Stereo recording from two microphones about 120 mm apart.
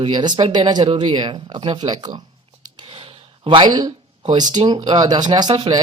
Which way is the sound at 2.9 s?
45° right (ahead or behind).